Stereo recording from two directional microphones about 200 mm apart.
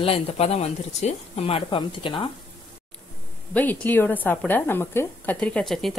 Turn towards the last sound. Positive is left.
turn(degrees=0)  # may be behind; listen again after turning